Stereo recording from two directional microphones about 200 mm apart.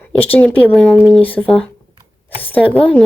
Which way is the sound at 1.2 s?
10° left (ahead or behind).